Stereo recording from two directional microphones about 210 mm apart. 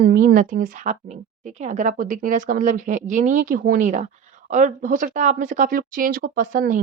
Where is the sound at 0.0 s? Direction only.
50° right (ahead or behind).